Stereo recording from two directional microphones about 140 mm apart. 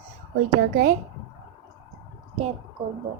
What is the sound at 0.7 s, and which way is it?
Speech, 85° right.